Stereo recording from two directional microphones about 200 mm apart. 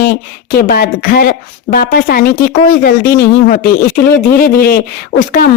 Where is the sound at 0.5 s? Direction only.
50° left (ahead or behind).